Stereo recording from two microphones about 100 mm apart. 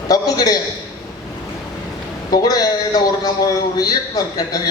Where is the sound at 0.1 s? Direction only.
40° left (ahead or behind).